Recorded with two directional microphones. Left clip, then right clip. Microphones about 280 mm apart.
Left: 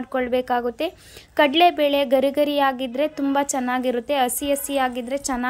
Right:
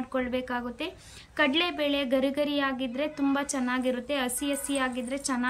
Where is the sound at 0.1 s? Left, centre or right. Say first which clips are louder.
Left 10 dB; centre.